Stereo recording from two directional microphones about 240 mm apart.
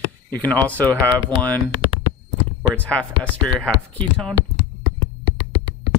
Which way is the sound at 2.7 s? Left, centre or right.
Centre.